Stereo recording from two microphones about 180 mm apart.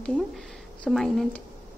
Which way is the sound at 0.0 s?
5° left (ahead or behind).